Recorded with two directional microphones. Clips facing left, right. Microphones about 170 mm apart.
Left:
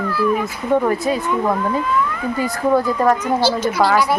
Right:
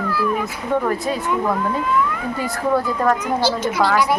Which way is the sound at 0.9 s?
Centre (ahead or behind).